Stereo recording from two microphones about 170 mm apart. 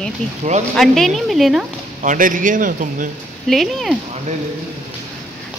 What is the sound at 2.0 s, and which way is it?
A man's voice, 50° right (ahead or behind).